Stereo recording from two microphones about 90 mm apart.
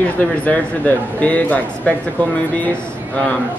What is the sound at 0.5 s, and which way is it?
Speech, 15° left (ahead or behind).